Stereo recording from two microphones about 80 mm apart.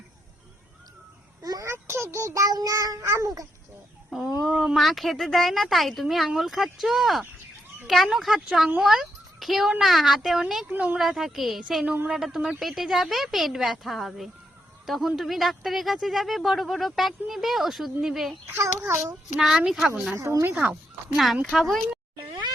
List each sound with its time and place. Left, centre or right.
1.4 s a sound: right
1.7 s a child's voice: right
4.4 s speech: centre
10.7 s speech: centre
10.9 s speech: centre
18.4 s a child's voice: right
19.4 s speech: centre
20.1 s a child's voice: right
20.5 s speech: centre
21.6 s speech: centre